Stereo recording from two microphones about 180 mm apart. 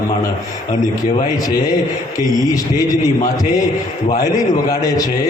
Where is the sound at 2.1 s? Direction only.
20° left (ahead or behind).